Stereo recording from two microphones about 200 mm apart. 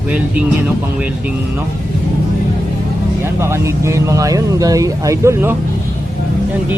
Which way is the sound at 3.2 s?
15° right (ahead or behind).